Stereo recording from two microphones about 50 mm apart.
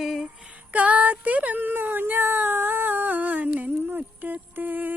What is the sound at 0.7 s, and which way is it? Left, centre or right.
Speech, right.